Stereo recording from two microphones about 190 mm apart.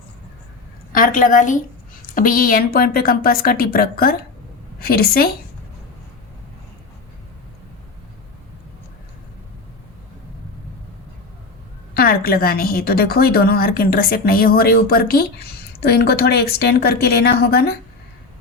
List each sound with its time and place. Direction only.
0.9 s a woman's voice: 45° left (ahead or behind)
11.9 s a woman's voice: 50° left (ahead or behind)